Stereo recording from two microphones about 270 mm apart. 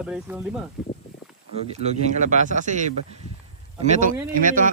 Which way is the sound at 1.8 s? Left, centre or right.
Right.